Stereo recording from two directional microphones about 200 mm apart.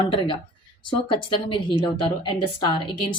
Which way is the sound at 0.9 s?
25° left (ahead or behind).